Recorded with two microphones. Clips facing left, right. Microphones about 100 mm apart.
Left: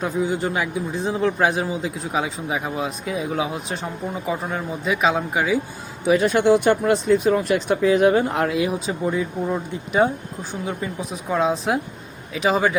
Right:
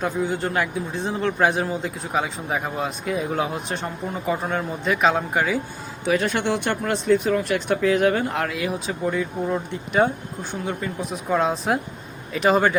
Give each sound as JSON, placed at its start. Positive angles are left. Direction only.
{"t": 0.0, "sound": "a man's voice", "side_deg": 0}